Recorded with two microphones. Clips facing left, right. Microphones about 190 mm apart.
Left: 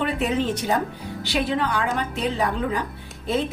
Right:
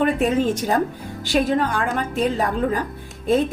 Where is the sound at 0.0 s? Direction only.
45° right (ahead or behind).